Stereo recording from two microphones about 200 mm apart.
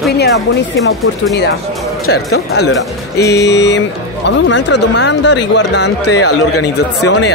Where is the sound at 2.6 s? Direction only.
55° left (ahead or behind).